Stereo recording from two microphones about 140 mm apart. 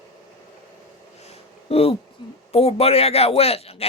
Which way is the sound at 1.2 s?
45° left (ahead or behind).